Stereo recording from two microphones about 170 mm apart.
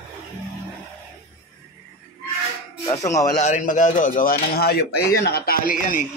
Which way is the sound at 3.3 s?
45° left (ahead or behind).